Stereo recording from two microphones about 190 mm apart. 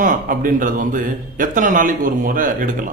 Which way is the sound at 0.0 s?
45° right (ahead or behind).